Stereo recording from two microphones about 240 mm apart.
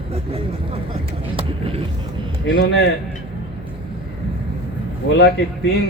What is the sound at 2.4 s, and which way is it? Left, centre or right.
Speech, left.